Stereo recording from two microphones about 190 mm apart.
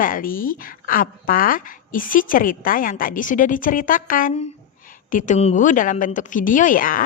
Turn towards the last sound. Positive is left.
turn(degrees=45)  # may be behind; listen again after turning